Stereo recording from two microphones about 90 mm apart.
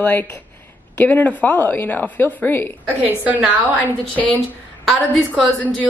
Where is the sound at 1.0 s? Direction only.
20° left (ahead or behind).